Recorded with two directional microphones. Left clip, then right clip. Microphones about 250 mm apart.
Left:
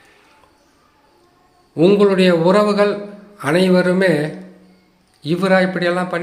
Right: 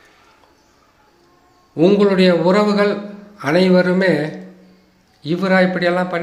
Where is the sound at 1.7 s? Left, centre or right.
Centre.